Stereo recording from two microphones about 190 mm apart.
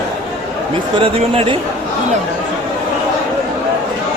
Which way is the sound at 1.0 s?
30° right (ahead or behind).